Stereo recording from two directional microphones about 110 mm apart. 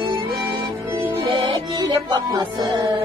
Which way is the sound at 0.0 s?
45° right (ahead or behind).